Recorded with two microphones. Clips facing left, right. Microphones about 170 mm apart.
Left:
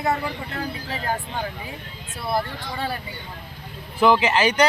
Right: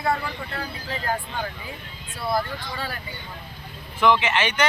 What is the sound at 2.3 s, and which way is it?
Speech, 25° left (ahead or behind).